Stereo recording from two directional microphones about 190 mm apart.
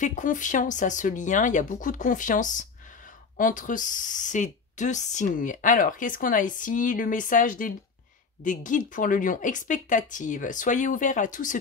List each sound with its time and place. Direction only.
0.0 s speech: 40° left (ahead or behind)